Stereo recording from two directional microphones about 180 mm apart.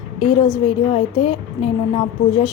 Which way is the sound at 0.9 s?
30° left (ahead or behind).